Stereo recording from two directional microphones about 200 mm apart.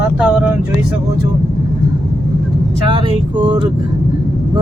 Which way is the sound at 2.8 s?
25° right (ahead or behind).